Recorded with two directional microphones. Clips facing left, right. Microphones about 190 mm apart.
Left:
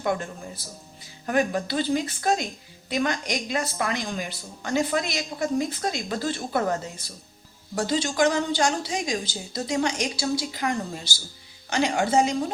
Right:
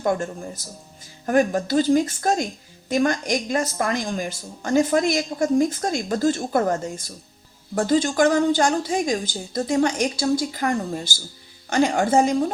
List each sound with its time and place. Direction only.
0.0 s a woman's voice: 45° right (ahead or behind)